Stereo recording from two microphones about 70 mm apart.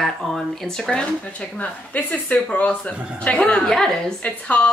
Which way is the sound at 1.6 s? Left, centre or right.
Left.